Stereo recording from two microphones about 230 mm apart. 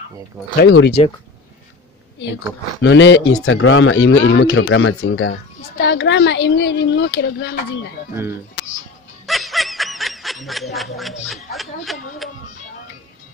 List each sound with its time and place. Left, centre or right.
0.6 s speech: left
2.8 s speech: left
9.2 s snicker: centre